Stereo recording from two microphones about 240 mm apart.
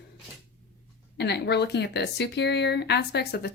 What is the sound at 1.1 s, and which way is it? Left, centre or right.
Speech, left.